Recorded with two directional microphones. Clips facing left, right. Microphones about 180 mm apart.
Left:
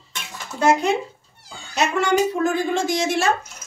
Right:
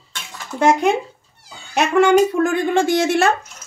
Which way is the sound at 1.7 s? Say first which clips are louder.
Right 6 dB; 60° right (ahead or behind).